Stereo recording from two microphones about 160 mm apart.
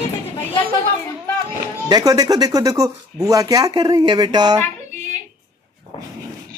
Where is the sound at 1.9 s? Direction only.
25° right (ahead or behind).